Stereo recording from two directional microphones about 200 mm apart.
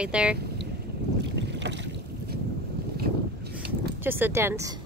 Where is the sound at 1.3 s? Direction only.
60° right (ahead or behind).